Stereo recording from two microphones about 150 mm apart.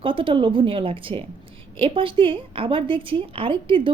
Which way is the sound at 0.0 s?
35° right (ahead or behind).